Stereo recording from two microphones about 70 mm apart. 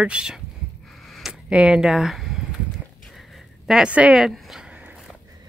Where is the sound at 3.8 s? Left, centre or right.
Centre.